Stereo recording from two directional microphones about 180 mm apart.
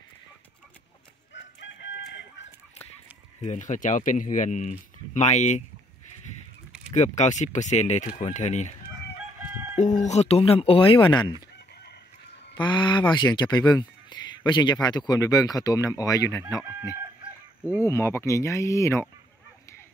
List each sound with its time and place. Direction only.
1.3 s chicken: 75° left (ahead or behind)
3.4 s speech: 45° left (ahead or behind)
6.9 s speech: 40° left (ahead or behind)
9.8 s speech: 40° left (ahead or behind); by 11.3 s 25° left (ahead or behind)
12.5 s speech: 25° left (ahead or behind)
17.8 s speech: 15° left (ahead or behind)